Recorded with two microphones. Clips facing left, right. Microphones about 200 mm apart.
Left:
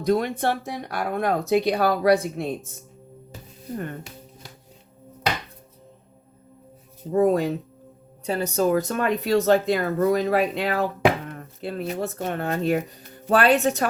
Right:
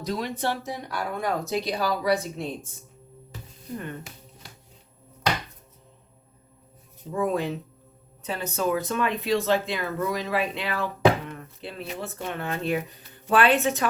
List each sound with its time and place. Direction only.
0.0 s speech: 55° left (ahead or behind)
7.1 s speech: 40° left (ahead or behind)